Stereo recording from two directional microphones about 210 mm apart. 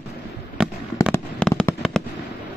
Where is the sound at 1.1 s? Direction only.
10° left (ahead or behind).